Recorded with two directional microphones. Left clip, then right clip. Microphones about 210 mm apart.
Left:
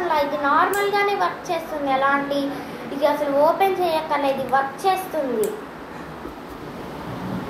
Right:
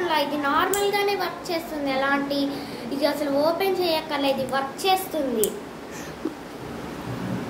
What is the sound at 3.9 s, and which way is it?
A woman's voice, 50° right (ahead or behind).